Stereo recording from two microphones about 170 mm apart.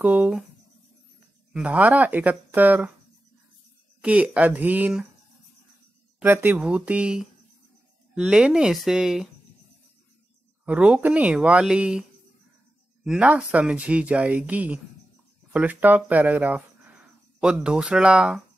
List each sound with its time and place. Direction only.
0.0 s speech: 10° right (ahead or behind)
1.5 s speech: 10° right (ahead or behind)
4.0 s speech: 5° right (ahead or behind)
6.1 s speech: 10° right (ahead or behind)
10.6 s speech: 5° right (ahead or behind)